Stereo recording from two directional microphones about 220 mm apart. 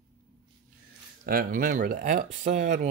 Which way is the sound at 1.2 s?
40° right (ahead or behind).